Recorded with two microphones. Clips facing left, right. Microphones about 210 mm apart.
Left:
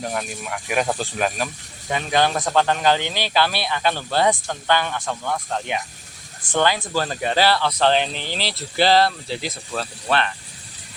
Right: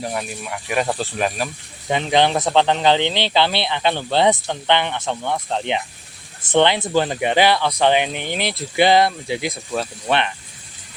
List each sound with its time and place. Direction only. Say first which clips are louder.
0.0 s speech: right 1 dB; 5° right (ahead or behind)
1.9 s speech: right 3 dB; 20° right (ahead or behind)